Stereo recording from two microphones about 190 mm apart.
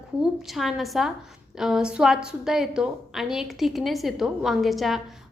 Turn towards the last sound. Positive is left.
turn(degrees=0)  # may be behind; listen again after turning